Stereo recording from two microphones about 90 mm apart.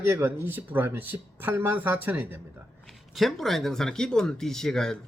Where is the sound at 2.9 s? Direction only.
Centre (ahead or behind).